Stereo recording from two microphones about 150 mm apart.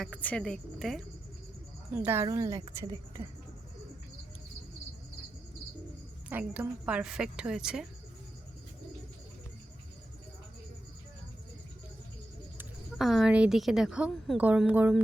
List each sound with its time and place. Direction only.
0.0 s a woman's voice: 5° left (ahead or behind)
1.9 s a woman's voice: 15° right (ahead or behind)
6.2 s a woman's voice: 10° right (ahead or behind)
13.0 s a woman's voice: centre (ahead or behind)